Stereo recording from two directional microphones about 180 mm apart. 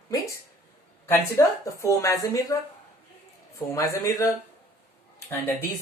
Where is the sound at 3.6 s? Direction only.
15° left (ahead or behind).